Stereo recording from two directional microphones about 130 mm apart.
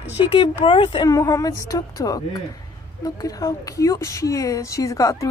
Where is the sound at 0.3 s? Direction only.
40° left (ahead or behind).